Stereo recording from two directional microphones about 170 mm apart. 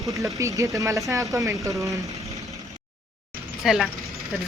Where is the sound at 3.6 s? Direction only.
Centre (ahead or behind).